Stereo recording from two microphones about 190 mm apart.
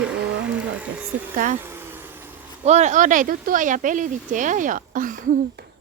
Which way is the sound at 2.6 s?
40° right (ahead or behind).